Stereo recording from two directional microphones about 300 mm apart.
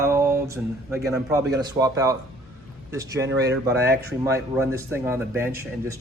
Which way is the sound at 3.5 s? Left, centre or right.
Right.